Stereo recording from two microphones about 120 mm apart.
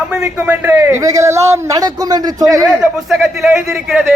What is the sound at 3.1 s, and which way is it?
Speech, 5° right (ahead or behind).